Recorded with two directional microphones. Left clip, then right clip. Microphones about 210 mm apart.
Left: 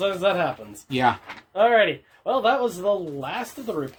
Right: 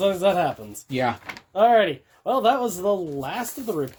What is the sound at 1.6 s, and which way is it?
Speech, 45° right (ahead or behind).